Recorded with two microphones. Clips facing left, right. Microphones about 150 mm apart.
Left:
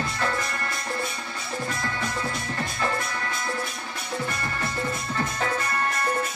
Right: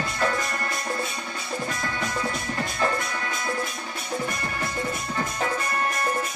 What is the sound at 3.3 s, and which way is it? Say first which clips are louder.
Music: right 1 dB; 25° right (ahead or behind).